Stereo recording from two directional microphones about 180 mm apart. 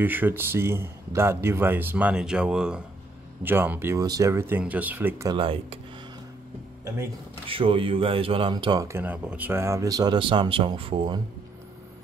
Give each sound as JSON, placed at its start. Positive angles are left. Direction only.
{"t": 0.0, "sound": "speech", "side_deg": -10}
{"t": 5.3, "sound": "speech", "side_deg": -30}
{"t": 7.4, "sound": "speech", "side_deg": -30}